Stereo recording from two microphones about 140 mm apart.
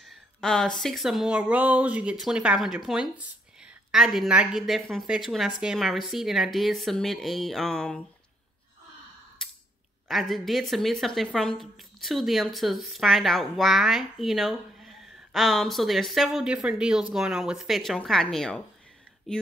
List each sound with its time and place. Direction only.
0.1 s a woman's voice: 5° left (ahead or behind)
10.0 s a woman's voice: centre (ahead or behind)